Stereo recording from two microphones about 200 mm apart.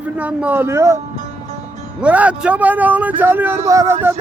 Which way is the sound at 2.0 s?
5° right (ahead or behind).